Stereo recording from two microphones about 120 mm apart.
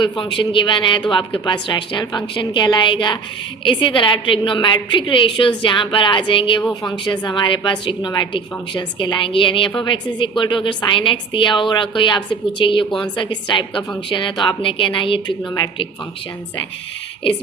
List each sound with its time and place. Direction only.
0.0 s a woman's voice: 45° left (ahead or behind)